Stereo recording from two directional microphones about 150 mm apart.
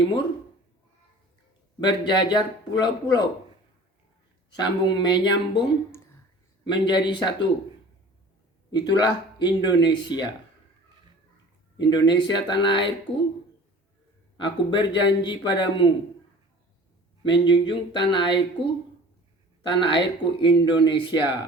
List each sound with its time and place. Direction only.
1.8 s speech: 30° left (ahead or behind)
4.5 s speech: 30° left (ahead or behind)
6.7 s speech: 30° left (ahead or behind)
8.8 s speech: 25° left (ahead or behind)
11.8 s speech: 30° left (ahead or behind)
14.3 s speech: 30° left (ahead or behind)
17.2 s speech: 30° left (ahead or behind)